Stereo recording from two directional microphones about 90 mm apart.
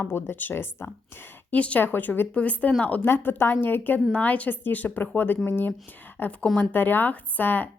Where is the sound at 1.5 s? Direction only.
15° left (ahead or behind).